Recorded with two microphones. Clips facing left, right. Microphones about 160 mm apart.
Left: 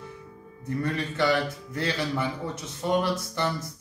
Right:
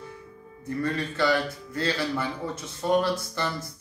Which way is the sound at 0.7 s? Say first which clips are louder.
Even; 20° left (ahead or behind).